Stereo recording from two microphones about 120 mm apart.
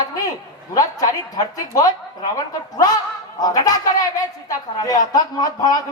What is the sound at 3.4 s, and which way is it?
Speech, 30° left (ahead or behind).